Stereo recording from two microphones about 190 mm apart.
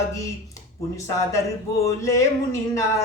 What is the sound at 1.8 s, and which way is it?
Speech, 15° left (ahead or behind).